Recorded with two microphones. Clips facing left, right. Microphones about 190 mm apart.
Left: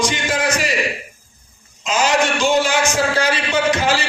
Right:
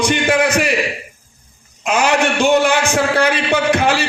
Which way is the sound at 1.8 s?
60° right (ahead or behind).